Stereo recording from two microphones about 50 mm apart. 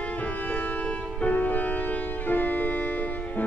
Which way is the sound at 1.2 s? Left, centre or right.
Left.